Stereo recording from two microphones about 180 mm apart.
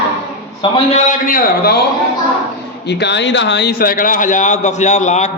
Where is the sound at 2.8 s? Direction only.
70° left (ahead or behind).